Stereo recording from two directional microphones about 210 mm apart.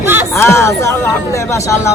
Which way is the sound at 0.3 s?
10° left (ahead or behind).